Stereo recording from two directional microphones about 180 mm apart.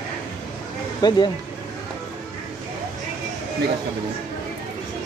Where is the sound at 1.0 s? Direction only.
25° left (ahead or behind).